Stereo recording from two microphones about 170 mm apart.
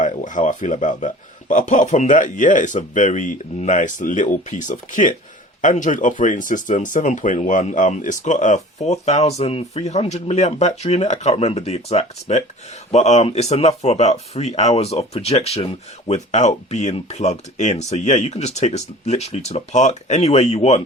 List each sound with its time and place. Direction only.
0.0 s a man's voice: 45° left (ahead or behind)